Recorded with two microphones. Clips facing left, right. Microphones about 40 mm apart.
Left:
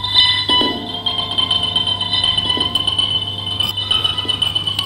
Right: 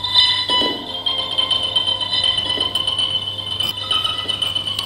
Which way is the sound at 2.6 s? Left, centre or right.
Centre.